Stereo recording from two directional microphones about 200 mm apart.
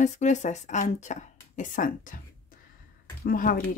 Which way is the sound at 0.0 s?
35° left (ahead or behind).